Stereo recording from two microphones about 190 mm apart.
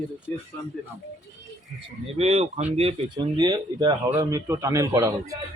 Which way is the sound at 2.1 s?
35° right (ahead or behind).